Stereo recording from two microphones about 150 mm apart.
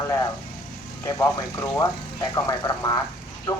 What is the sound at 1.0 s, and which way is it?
Speech, 20° left (ahead or behind).